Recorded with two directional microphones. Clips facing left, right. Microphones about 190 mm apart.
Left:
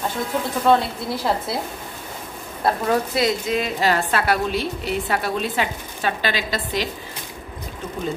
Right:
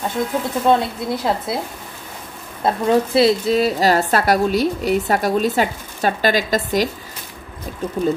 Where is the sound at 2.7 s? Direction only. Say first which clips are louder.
Right 4 dB; 30° right (ahead or behind); by 6.8 s 45° right (ahead or behind).